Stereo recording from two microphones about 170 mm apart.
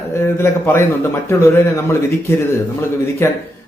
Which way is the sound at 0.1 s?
15° left (ahead or behind).